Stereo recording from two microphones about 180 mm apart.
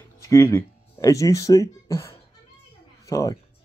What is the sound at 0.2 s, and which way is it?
Speech, 15° left (ahead or behind).